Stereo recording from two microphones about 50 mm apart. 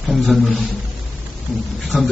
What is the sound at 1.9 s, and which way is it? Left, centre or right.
Speech, centre.